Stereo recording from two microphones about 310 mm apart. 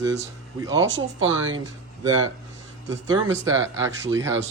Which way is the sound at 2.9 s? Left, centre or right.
Centre.